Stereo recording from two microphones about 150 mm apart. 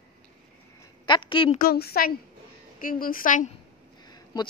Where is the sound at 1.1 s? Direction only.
35° left (ahead or behind).